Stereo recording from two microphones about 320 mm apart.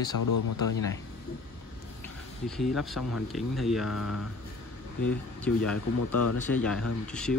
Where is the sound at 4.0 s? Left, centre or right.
Left.